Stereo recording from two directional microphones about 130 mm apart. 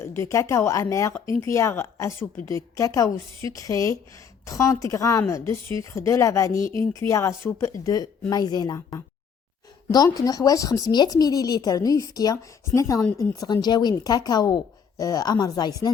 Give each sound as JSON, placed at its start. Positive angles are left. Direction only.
{"t": 0.0, "sound": "speech", "side_deg": 20}